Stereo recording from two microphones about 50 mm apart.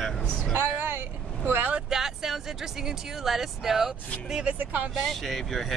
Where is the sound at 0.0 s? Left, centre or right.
Centre.